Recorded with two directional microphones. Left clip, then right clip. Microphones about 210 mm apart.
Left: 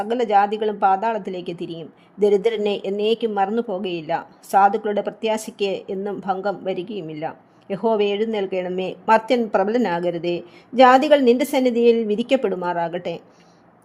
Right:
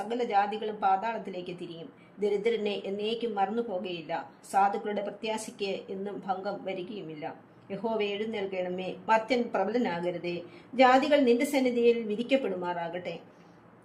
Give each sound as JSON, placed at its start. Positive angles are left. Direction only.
{"t": 0.0, "sound": "speech", "side_deg": 50}